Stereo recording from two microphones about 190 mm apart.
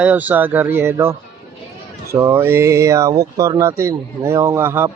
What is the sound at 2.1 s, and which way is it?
Speech, 15° right (ahead or behind).